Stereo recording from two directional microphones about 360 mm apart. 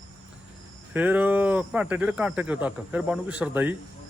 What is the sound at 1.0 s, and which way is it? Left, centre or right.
Speech, centre.